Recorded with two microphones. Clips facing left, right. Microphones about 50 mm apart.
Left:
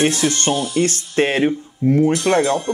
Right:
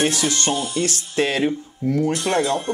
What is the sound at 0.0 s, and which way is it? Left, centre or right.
Speech, left.